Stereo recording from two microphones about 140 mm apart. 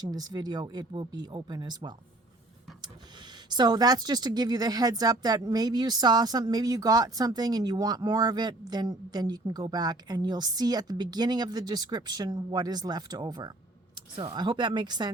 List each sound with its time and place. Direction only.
0.1 s speech: 25° right (ahead or behind)
3.5 s speech: 30° right (ahead or behind)